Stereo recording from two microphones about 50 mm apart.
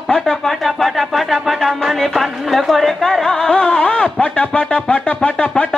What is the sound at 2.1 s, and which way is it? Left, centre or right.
Music, centre.